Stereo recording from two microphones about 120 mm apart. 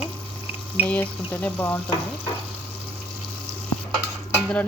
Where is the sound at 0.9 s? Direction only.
15° left (ahead or behind).